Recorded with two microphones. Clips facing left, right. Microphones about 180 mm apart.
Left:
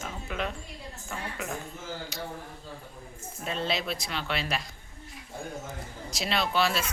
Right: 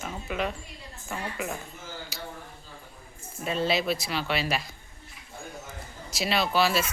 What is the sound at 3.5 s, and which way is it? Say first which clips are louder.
Speech: right 5 dB; 5° right (ahead or behind).